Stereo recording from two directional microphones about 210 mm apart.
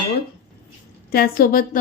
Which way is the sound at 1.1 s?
45° left (ahead or behind).